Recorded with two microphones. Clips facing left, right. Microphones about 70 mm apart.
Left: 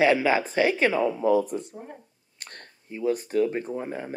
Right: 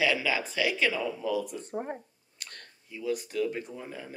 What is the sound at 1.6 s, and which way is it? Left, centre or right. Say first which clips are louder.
Speech: right 6 dB; right.